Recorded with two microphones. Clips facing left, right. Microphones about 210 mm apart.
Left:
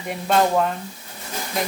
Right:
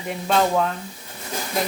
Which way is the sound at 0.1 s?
5° left (ahead or behind).